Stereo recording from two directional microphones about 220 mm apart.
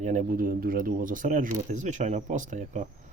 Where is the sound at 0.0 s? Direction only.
35° right (ahead or behind).